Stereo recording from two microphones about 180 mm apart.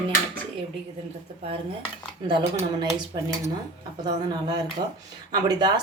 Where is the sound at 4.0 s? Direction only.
20° right (ahead or behind).